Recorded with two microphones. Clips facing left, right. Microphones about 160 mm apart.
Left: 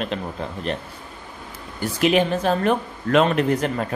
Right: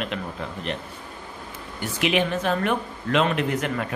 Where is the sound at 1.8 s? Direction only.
40° left (ahead or behind).